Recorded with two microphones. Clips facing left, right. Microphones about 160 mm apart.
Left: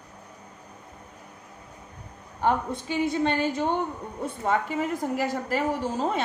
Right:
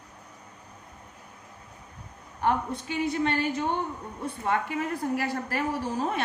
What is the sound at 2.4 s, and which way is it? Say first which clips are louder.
A woman's voice: left 2 dB; 20° left (ahead or behind).